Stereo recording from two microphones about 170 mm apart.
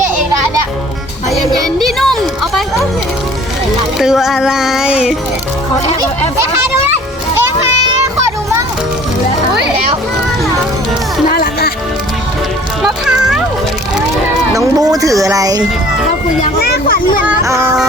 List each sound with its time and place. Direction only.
1.5 s a sound: centre (ahead or behind)
3.9 s music: 5° right (ahead or behind)
11.3 s music: 60° left (ahead or behind)
12.8 s music: 5° right (ahead or behind)
14.5 s speech: 20° right (ahead or behind)
16.6 s speech: 70° left (ahead or behind)
17.2 s speech: 15° right (ahead or behind)